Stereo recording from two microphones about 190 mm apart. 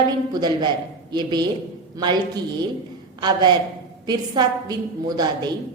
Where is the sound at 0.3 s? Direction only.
20° right (ahead or behind).